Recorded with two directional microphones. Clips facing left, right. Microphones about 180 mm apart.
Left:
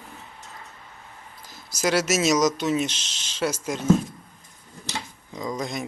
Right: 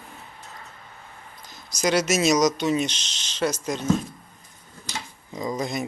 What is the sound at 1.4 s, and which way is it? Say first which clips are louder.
Speech: right 1 dB; 5° left (ahead or behind).